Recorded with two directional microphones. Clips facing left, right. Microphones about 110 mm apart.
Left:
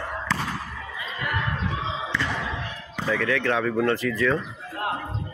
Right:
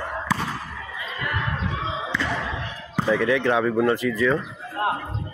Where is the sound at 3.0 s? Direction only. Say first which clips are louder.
Right 3 dB; 15° right (ahead or behind).